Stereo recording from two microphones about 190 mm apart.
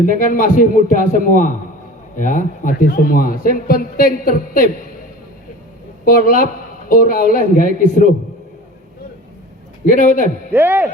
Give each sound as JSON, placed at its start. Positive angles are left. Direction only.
{"t": 0.0, "sound": "a man's voice", "side_deg": 45}
{"t": 6.1, "sound": "a man's voice", "side_deg": 50}
{"t": 9.8, "sound": "a man's voice", "side_deg": 45}
{"t": 10.5, "sound": "speech", "side_deg": -10}